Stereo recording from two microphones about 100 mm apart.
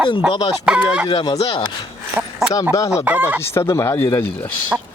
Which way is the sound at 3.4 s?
30° left (ahead or behind).